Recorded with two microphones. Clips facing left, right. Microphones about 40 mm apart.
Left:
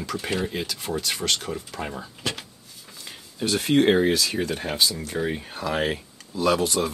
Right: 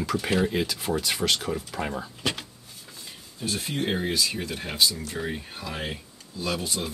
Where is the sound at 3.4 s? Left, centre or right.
Left.